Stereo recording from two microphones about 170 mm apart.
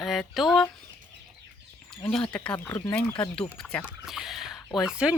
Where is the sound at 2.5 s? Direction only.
15° left (ahead or behind).